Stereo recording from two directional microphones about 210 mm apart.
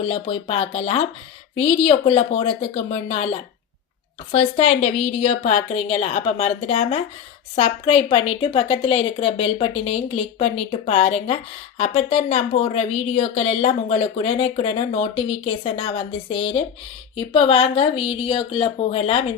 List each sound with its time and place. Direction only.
0.0 s speech: 25° left (ahead or behind)
4.3 s speech: 30° left (ahead or behind)